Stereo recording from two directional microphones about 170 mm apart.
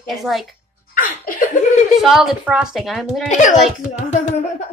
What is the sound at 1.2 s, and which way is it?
Laughter, 55° left (ahead or behind).